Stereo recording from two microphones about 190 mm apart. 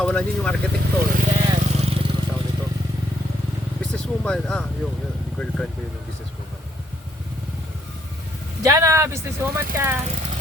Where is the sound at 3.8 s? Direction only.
5° left (ahead or behind).